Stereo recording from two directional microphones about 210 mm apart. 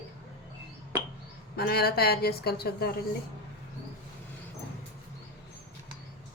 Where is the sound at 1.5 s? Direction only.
45° left (ahead or behind).